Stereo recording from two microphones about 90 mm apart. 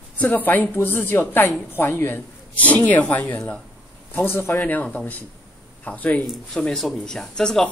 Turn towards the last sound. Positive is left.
turn(degrees=5)  # may be behind; listen again after turning